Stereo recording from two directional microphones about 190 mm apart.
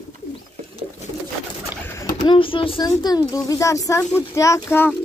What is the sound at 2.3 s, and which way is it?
Speech, 25° left (ahead or behind).